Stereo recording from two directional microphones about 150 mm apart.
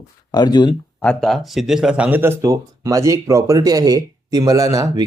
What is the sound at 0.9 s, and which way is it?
Speech, 5° left (ahead or behind).